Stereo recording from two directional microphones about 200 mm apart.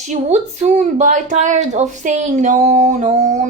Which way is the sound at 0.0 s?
35° right (ahead or behind).